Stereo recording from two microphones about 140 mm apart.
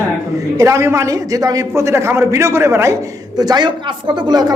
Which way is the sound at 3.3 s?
30° right (ahead or behind).